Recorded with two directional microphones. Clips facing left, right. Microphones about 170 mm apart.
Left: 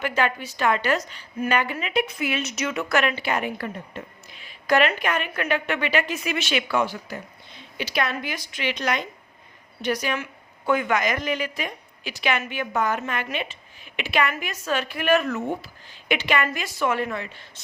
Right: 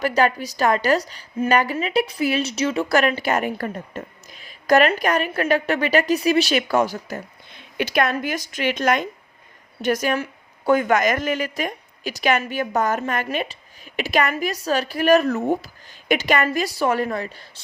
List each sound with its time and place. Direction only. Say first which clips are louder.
0.0 s a woman's voice: right 5 dB; 40° right (ahead or behind)